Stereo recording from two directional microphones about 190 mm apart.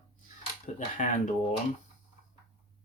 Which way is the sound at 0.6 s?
40° left (ahead or behind).